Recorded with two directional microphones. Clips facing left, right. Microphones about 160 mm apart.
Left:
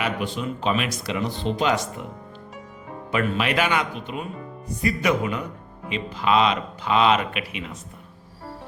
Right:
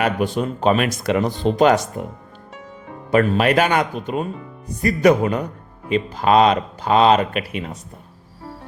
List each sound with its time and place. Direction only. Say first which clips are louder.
0.0 s speech: right 6 dB; 45° right (ahead or behind)
3.1 s speech: right 8 dB; 45° right (ahead or behind)